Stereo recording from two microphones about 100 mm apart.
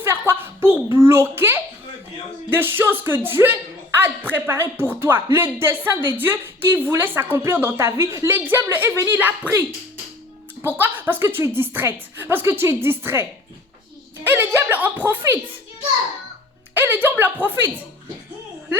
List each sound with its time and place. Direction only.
0.0 s a sound: 25° right (ahead or behind)
2.5 s speech: 20° right (ahead or behind)
10.6 s speech: 20° right (ahead or behind)
14.3 s a woman's voice: 20° right (ahead or behind)
16.7 s speech: 20° right (ahead or behind)